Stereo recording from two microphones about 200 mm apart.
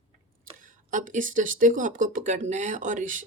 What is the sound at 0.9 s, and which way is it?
Speech, 40° right (ahead or behind).